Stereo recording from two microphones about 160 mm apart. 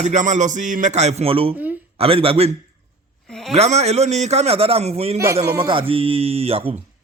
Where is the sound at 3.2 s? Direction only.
5° left (ahead or behind).